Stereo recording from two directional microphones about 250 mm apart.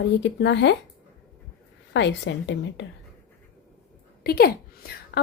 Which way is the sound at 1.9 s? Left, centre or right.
Left.